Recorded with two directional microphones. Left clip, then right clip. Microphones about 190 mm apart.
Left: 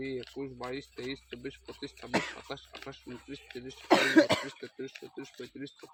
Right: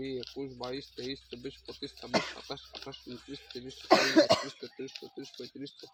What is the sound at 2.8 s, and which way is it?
Speech, 5° right (ahead or behind).